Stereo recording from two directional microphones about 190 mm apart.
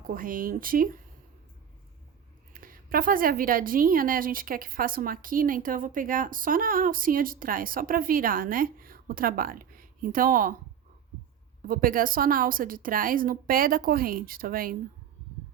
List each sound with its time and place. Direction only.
0.1 s a woman's voice: 45° right (ahead or behind)
2.5 s a woman's voice: 50° right (ahead or behind)
11.7 s a woman's voice: 50° right (ahead or behind)